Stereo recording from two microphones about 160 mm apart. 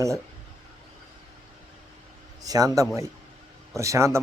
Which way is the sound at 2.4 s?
20° right (ahead or behind).